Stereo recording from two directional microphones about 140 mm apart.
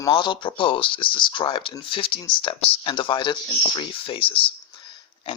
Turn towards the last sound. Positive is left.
turn(degrees=40)  # may be behind; listen again after turning